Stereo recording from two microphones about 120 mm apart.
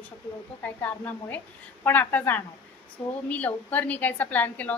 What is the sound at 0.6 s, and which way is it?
A woman's voice, 15° left (ahead or behind).